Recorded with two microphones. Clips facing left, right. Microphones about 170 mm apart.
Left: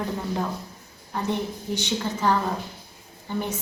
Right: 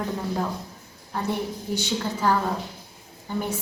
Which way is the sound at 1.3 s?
10° right (ahead or behind).